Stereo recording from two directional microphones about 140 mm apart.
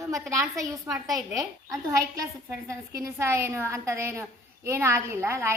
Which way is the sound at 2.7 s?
20° right (ahead or behind).